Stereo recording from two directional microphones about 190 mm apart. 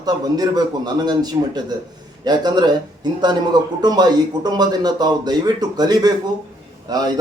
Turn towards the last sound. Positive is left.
turn(degrees=-20)  # may be behind; listen again after turning